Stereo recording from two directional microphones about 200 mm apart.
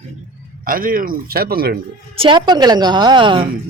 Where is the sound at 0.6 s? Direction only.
45° right (ahead or behind).